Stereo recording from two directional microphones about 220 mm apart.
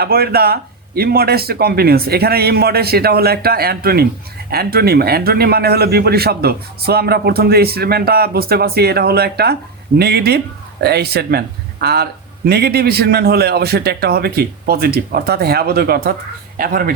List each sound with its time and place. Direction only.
0.0 s a man's voice: 45° right (ahead or behind)